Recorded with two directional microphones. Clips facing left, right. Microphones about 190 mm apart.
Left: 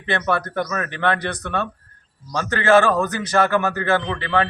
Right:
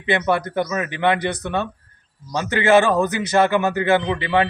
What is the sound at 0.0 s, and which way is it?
A man's voice, 15° right (ahead or behind).